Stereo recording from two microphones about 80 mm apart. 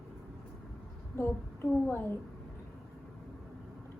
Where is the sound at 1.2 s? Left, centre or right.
Left.